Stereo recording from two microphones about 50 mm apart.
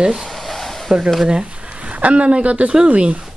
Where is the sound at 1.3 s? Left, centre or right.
Centre.